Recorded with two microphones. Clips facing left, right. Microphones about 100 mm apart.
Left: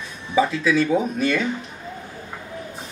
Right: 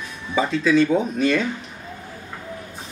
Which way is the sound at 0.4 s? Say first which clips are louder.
Right 1 dB; 5° left (ahead or behind).